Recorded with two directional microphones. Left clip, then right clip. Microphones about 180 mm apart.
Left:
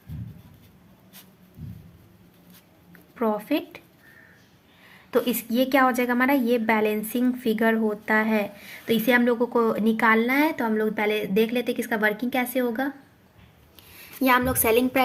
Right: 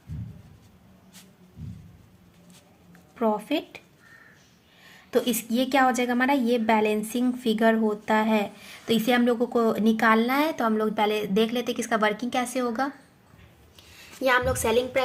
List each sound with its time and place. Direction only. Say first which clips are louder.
3.2 s a sound: even; 10° right (ahead or behind)
5.1 s a woman's voice: left 1 dB; 20° right (ahead or behind)
13.9 s a woman's voice: left 2 dB; 20° left (ahead or behind)